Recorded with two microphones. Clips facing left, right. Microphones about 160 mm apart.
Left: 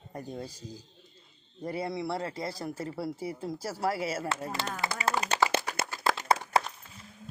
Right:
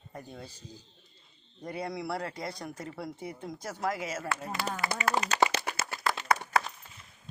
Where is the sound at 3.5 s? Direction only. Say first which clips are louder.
Left 1 dB; 30° left (ahead or behind).